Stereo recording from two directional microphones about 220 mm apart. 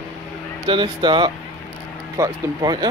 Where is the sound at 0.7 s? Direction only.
20° right (ahead or behind).